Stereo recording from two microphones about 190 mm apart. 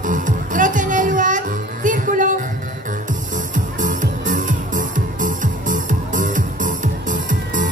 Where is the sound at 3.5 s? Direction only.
45° right (ahead or behind).